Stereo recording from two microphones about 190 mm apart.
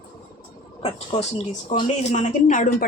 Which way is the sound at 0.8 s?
35° left (ahead or behind).